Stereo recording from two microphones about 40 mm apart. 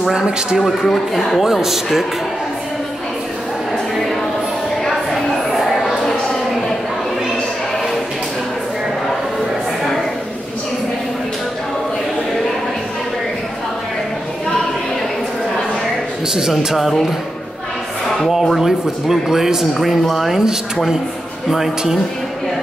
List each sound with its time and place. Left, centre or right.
0.1 s speech: centre
0.6 s speech: centre
4.8 s a sound: centre
16.7 s speech: centre
18.6 s speech: centre